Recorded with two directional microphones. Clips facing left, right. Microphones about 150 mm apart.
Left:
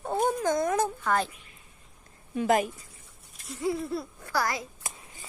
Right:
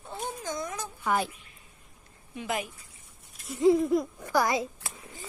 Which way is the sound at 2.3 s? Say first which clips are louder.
Left 8 dB; 45° left (ahead or behind).